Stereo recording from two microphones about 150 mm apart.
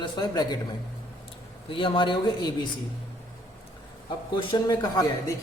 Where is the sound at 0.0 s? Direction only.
25° left (ahead or behind).